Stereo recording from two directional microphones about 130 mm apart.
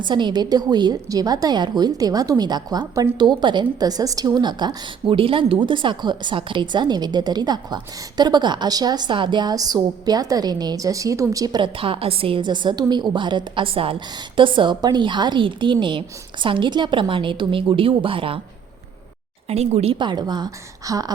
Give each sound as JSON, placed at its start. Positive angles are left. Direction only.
{"t": 0.0, "sound": "a woman's voice", "side_deg": -35}
{"t": 19.5, "sound": "speech", "side_deg": -55}
{"t": 20.0, "sound": "a woman's voice", "side_deg": -35}